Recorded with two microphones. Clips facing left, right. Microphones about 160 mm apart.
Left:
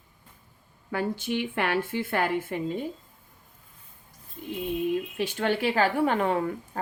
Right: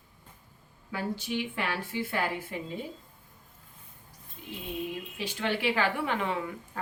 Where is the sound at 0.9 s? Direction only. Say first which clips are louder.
Left 4 dB; 55° left (ahead or behind).